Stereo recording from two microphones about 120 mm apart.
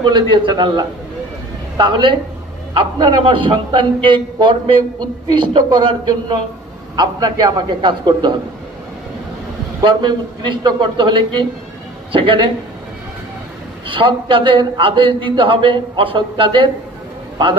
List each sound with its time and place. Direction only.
0.1 s a man's voice: 40° right (ahead or behind)
9.8 s a man's voice: 40° right (ahead or behind)
13.8 s a man's voice: 45° right (ahead or behind)